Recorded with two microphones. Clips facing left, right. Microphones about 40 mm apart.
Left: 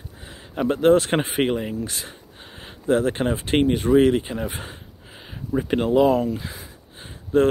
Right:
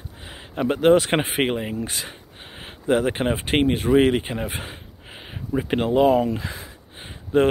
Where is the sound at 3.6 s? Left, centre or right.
Right.